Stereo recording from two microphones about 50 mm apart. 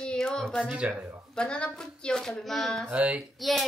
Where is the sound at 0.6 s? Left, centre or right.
Right.